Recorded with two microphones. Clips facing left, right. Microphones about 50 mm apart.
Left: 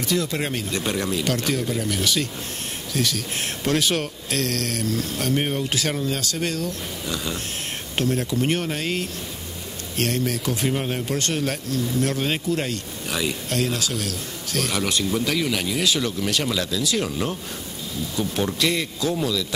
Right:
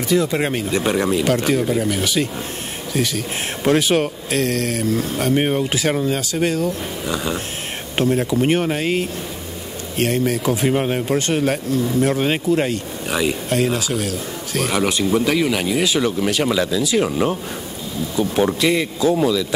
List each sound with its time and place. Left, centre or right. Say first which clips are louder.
0.1 s a man's voice: right 7 dB; centre